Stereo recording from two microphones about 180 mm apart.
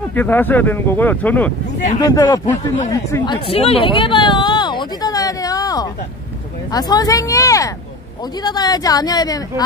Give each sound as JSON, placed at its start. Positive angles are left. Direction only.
{"t": 0.1, "sound": "speech", "side_deg": 10}
{"t": 2.0, "sound": "speech", "side_deg": 20}
{"t": 3.4, "sound": "a sound", "side_deg": 35}
{"t": 6.7, "sound": "speech", "side_deg": 20}